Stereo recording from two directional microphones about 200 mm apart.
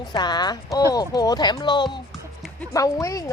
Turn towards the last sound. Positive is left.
turn(degrees=15)  # may be behind; listen again after turning